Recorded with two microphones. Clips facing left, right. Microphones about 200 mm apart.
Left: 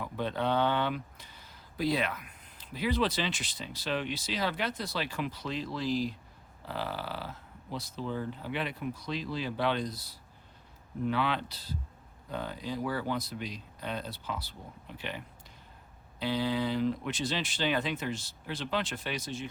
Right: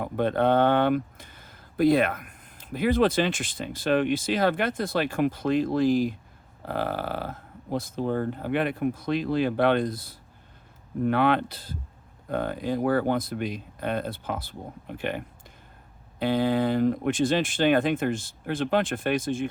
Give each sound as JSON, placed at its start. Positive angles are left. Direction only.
{"t": 0.0, "sound": "speech", "side_deg": -55}